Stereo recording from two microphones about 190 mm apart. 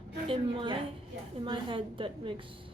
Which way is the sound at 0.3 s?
25° right (ahead or behind).